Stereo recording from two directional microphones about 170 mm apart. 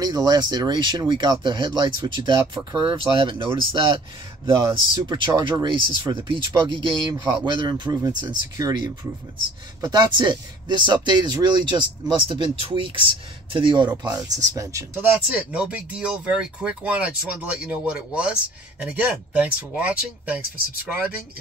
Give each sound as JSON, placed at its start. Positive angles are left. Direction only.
{"t": 0.0, "sound": "speech", "side_deg": -25}
{"t": 15.5, "sound": "speech", "side_deg": -5}